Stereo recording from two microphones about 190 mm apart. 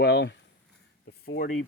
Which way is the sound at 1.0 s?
75° left (ahead or behind).